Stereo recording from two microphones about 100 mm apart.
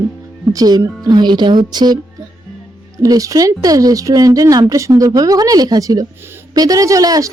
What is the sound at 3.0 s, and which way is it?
A woman's voice, 35° right (ahead or behind).